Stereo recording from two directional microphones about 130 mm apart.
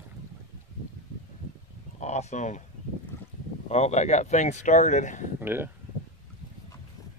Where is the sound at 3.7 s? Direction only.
60° left (ahead or behind).